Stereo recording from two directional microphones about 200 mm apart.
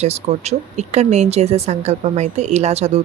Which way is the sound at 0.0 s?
30° right (ahead or behind).